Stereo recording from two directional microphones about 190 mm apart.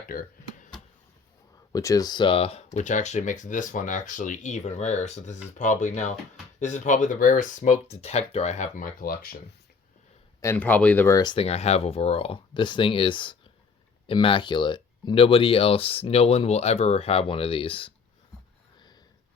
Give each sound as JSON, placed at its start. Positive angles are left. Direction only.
{"t": 0.1, "sound": "a sound", "side_deg": 50}
{"t": 1.7, "sound": "speech", "side_deg": 20}
{"t": 10.4, "sound": "speech", "side_deg": 10}